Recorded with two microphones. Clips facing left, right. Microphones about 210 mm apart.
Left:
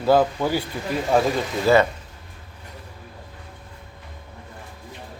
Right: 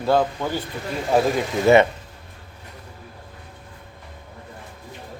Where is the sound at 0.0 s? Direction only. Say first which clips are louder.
Left 2 dB; 5° left (ahead or behind).